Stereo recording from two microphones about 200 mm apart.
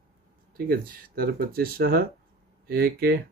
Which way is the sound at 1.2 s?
50° right (ahead or behind).